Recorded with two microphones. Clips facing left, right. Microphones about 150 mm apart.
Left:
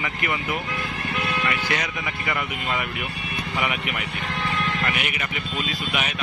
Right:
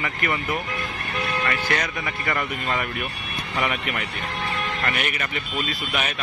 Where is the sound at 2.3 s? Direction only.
5° left (ahead or behind).